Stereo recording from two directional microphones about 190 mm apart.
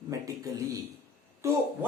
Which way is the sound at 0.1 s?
15° right (ahead or behind).